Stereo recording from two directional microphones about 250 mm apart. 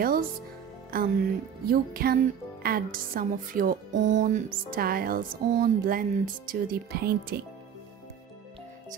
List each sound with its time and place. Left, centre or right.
0.0 s speech: right